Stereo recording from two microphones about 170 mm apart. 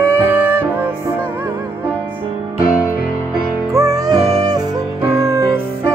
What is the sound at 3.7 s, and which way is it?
Music, 20° right (ahead or behind).